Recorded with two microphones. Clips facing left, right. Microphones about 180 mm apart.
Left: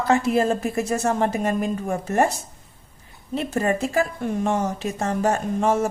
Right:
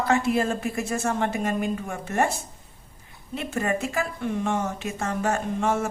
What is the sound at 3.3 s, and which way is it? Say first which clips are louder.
Speech: left 4 dB; 35° left (ahead or behind).